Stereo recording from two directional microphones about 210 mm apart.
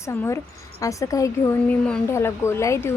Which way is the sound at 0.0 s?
10° left (ahead or behind).